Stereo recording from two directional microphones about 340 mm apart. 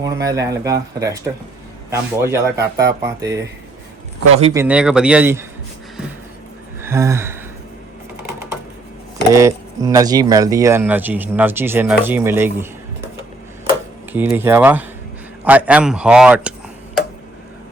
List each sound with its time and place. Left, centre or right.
0.0 s speech: centre
4.6 s speech: centre
6.8 s gasp: centre
9.3 s speech: centre
14.1 s speech: centre